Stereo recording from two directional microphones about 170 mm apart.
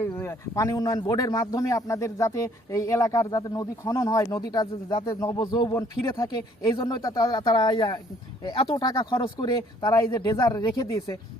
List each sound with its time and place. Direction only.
0.0 s a man's voice: 15° left (ahead or behind)